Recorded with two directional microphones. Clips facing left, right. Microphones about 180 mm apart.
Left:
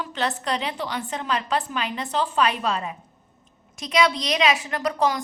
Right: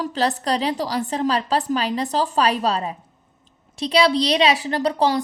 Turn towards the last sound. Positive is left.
turn(degrees=-30)  # may be behind; listen again after turning